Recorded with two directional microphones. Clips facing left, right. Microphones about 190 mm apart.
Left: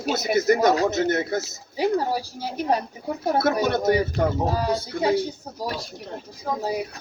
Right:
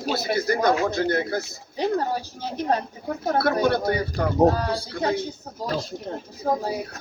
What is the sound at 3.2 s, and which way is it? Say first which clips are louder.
Speech: even; 20° left (ahead or behind).